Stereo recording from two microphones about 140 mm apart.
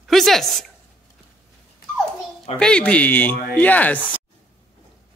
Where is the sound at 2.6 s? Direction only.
10° left (ahead or behind).